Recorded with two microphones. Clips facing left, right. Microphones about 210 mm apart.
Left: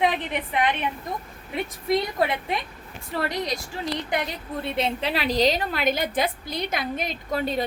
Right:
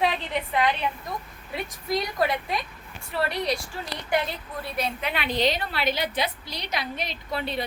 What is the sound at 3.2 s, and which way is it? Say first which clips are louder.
A woman's voice: right 1 dB; 20° left (ahead or behind).